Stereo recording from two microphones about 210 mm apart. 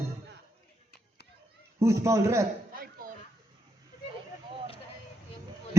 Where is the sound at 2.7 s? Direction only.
45° right (ahead or behind).